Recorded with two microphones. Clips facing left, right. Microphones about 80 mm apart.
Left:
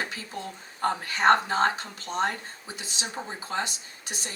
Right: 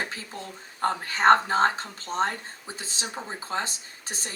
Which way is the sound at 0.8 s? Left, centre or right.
Right.